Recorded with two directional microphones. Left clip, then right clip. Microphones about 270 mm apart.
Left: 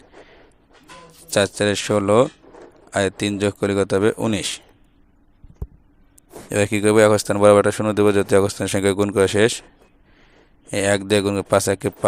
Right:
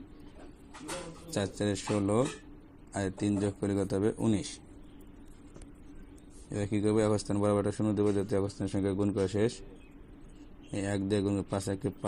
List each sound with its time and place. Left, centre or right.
1.3 s speech: left
6.5 s speech: left
10.7 s speech: left